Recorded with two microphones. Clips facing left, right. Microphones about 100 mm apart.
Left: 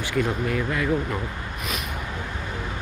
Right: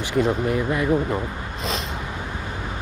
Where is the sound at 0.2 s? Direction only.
25° right (ahead or behind).